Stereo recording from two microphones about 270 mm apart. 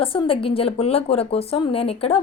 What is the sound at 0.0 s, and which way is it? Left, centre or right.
A woman's voice, centre.